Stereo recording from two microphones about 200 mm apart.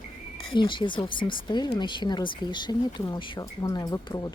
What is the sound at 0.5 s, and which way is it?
Speech, 25° left (ahead or behind).